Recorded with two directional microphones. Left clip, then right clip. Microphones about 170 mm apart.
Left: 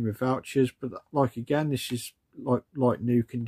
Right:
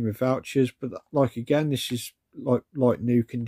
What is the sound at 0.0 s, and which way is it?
Speech, 20° right (ahead or behind).